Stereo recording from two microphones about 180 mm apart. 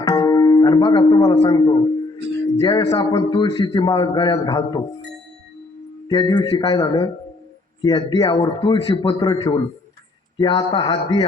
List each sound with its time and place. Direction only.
0.0 s music: 20° left (ahead or behind)
2.6 s a man's voice: 25° left (ahead or behind)
6.1 s a man's voice: 20° left (ahead or behind)